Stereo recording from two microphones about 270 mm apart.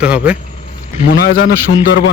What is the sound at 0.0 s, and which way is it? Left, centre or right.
Speech, centre.